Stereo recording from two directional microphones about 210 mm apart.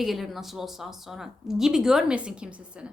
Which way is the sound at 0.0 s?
Centre (ahead or behind).